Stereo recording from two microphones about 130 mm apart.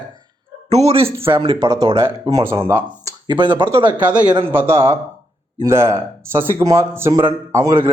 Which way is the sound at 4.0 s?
10° right (ahead or behind).